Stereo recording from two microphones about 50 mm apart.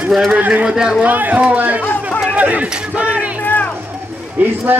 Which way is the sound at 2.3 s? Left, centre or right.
Right.